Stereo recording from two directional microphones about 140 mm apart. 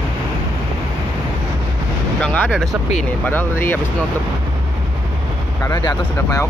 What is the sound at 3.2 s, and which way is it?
Speech, 15° left (ahead or behind).